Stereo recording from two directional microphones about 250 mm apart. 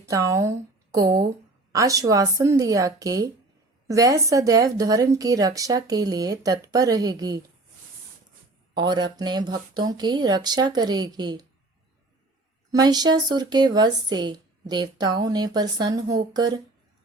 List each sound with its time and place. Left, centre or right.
0.0 s a woman's voice: centre
8.7 s a woman's voice: centre
12.7 s a woman's voice: centre